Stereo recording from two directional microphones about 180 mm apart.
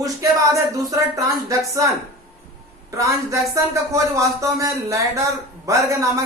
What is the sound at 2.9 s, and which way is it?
Speech, 15° right (ahead or behind).